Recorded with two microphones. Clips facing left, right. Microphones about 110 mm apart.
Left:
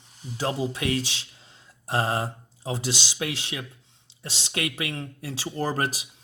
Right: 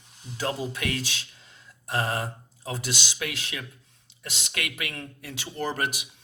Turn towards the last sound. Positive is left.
turn(degrees=35)  # may be behind; listen again after turning